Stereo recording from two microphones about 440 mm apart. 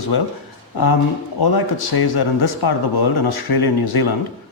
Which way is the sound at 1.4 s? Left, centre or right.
Left.